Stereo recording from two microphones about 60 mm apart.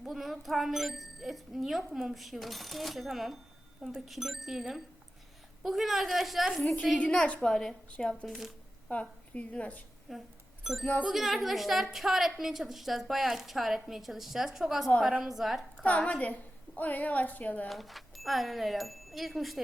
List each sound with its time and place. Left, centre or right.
0.0 s a woman's voice: centre
8.3 s a woman's voice: centre
8.9 s a woman's voice: left
10.1 s a woman's voice: centre
10.6 s music: centre
11.1 s a woman's voice: centre
15.9 s a woman's voice: centre
17.7 s a woman's voice: centre